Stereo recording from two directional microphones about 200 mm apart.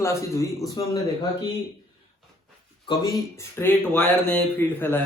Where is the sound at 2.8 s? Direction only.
20° left (ahead or behind).